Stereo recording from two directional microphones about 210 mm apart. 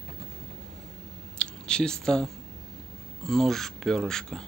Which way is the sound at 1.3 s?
5° left (ahead or behind).